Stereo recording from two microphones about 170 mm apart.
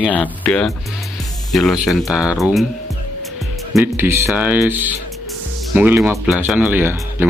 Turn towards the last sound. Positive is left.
turn(degrees=-10)  # may be behind; listen again after turning